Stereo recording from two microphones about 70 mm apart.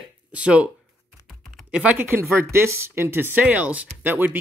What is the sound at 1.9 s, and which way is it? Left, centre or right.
Speech, right.